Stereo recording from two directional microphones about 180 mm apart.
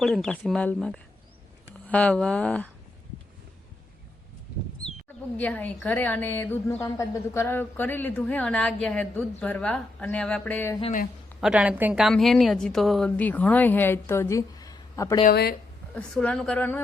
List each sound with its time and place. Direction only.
0.0 s speech: centre (ahead or behind)
5.4 s a woman's voice: 10° left (ahead or behind)
11.3 s a woman's voice: 5° right (ahead or behind); by 15.2 s 20° left (ahead or behind)
15.2 s speech: 55° left (ahead or behind)
16.0 s a woman's voice: 5° left (ahead or behind)